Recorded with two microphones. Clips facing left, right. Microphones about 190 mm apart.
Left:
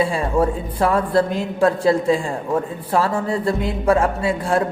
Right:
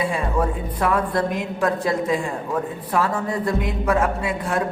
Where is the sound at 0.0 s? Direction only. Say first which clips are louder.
Left 4 dB; 30° left (ahead or behind).